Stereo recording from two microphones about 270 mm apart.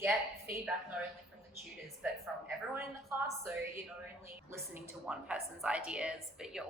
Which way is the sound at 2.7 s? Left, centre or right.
Centre.